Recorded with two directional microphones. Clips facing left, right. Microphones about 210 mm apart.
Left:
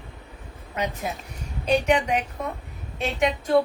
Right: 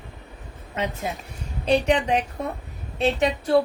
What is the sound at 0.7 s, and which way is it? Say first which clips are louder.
A woman's voice: right 1 dB; 30° right (ahead or behind).